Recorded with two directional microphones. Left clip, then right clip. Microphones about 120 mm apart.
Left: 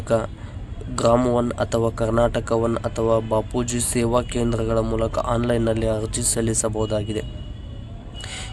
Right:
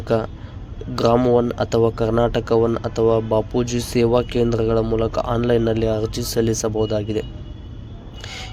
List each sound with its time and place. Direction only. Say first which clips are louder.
0.1 s speech: right 1 dB; 15° right (ahead or behind)
1.2 s speech: right 4 dB; centre (ahead or behind)
1.5 s speech: right 4 dB; 15° right (ahead or behind)
8.2 s a sound: right 1 dB; 10° right (ahead or behind)